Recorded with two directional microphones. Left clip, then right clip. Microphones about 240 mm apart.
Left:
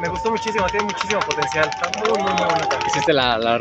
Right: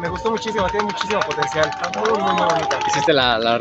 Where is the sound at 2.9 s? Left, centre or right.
Centre.